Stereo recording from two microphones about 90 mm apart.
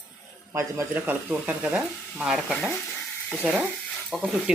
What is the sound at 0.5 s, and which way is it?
Speech, 30° right (ahead or behind).